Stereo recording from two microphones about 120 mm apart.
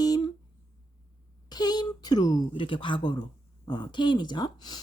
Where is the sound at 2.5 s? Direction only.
45° left (ahead or behind).